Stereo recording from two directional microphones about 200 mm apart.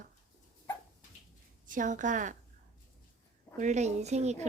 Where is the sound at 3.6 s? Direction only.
35° right (ahead or behind).